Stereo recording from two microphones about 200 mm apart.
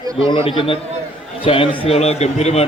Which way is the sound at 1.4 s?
25° left (ahead or behind).